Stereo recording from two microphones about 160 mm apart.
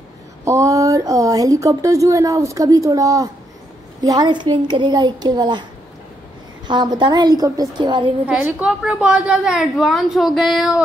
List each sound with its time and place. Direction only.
0.5 s speech: 20° right (ahead or behind)
6.7 s speech: 30° right (ahead or behind)
8.3 s a woman's voice: 10° right (ahead or behind)